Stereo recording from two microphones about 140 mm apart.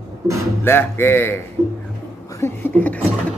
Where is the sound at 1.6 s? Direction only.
20° right (ahead or behind).